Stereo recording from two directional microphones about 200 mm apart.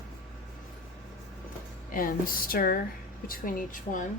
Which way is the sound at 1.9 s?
45° left (ahead or behind).